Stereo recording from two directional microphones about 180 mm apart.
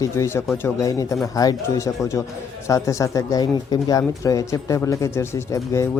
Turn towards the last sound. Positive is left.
turn(degrees=15)  # may be behind; listen again after turning